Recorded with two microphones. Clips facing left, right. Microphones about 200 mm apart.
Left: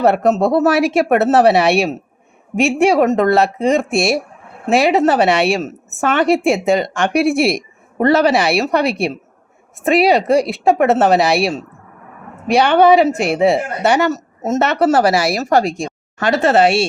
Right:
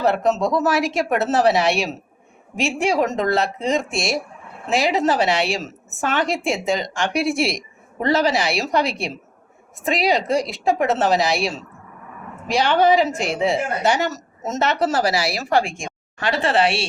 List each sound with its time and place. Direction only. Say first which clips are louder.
0.0 s a woman's voice: left 5 dB; 60° left (ahead or behind); by 16.8 s 45° left (ahead or behind)